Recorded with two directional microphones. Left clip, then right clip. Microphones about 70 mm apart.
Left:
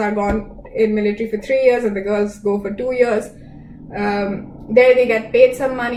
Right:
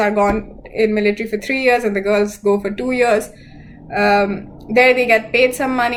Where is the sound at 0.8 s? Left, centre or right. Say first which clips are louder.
Right 1 dB; right.